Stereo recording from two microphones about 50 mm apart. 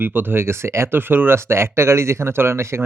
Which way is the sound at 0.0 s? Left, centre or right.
Right.